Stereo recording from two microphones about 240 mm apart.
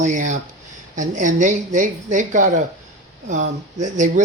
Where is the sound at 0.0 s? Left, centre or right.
Right.